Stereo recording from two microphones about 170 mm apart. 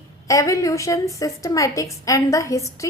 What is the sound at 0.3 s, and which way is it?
A woman's voice, 20° left (ahead or behind).